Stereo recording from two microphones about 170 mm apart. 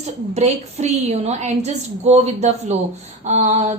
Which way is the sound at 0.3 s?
40° right (ahead or behind).